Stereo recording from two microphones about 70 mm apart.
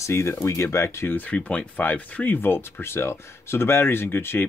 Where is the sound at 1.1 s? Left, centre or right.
Left.